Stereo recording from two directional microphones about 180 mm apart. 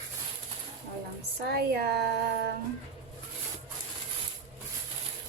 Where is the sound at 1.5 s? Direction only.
65° right (ahead or behind).